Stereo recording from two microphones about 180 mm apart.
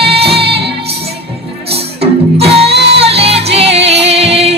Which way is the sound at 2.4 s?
35° right (ahead or behind).